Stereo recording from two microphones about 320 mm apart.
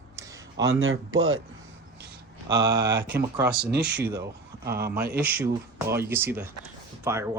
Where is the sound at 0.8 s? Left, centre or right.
Right.